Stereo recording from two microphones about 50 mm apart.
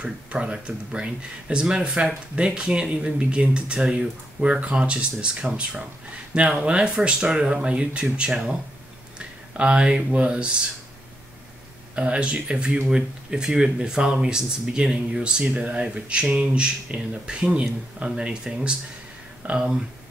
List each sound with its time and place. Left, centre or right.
0.0 s speech: centre
9.6 s speech: right
11.9 s speech: right
19.4 s speech: right